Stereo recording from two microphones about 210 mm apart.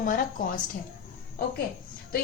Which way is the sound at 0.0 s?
40° left (ahead or behind).